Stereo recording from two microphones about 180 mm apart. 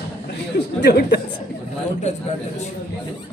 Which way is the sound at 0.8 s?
70° left (ahead or behind).